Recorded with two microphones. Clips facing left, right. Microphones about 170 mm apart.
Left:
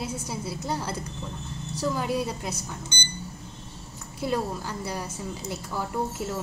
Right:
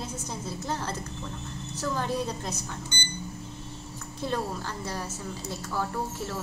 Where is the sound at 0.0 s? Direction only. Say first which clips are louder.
Left 3 dB; 10° left (ahead or behind).